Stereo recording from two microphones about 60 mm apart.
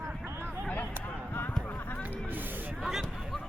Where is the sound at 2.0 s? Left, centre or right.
Right.